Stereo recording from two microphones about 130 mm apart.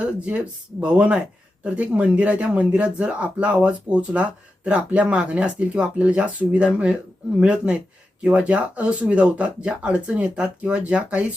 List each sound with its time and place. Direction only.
0.0 s speech: 10° right (ahead or behind)